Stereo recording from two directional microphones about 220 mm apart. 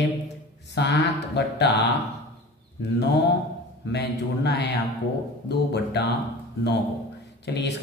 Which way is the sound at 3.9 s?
50° left (ahead or behind).